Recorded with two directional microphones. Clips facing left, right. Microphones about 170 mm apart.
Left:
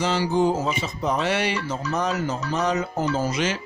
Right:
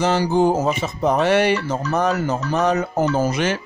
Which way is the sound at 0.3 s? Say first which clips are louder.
Right 3 dB; 70° right (ahead or behind).